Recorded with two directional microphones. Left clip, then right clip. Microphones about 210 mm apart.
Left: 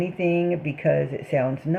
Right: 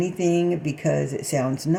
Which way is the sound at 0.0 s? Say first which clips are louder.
Right 1 dB; 20° right (ahead or behind).